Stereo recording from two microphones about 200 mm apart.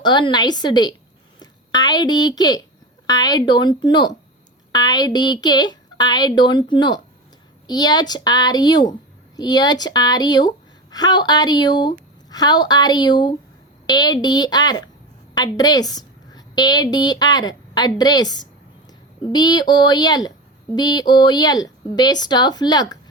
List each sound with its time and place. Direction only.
0.0 s a woman's voice: 20° left (ahead or behind)